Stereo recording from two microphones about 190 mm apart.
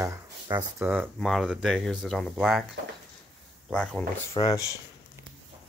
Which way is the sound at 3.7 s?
5° left (ahead or behind).